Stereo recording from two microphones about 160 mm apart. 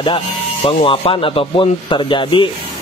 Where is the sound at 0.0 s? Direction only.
35° left (ahead or behind).